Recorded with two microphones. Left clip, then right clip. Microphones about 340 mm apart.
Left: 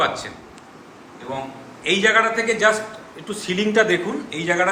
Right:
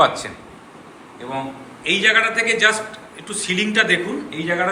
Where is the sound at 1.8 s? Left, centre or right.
Centre.